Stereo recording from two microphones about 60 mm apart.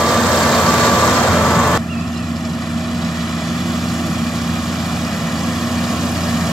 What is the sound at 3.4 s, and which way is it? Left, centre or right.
Vehicle, centre.